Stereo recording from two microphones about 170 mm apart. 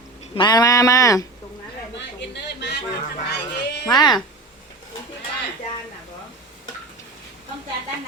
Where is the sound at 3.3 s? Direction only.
75° left (ahead or behind).